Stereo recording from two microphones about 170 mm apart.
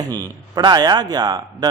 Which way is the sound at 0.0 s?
20° right (ahead or behind).